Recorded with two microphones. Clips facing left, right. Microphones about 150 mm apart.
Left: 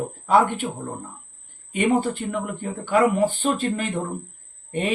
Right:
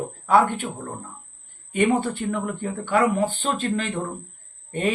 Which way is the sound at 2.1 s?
10° left (ahead or behind).